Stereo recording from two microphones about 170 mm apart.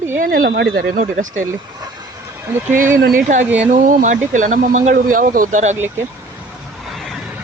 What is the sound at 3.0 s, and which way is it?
Speech, 50° right (ahead or behind).